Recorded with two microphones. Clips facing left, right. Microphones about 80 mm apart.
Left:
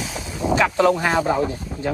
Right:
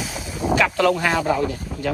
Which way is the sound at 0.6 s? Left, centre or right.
Left.